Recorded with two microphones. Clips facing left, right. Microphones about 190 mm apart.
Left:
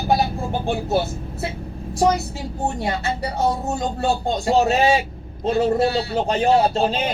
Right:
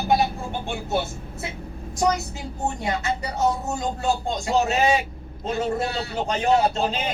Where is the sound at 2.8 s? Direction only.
35° left (ahead or behind).